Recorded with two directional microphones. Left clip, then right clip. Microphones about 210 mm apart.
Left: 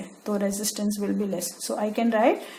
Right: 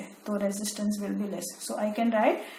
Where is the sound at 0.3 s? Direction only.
50° left (ahead or behind).